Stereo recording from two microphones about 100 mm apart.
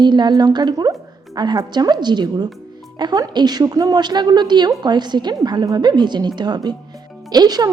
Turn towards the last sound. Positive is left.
turn(degrees=-40)  # may be behind; listen again after turning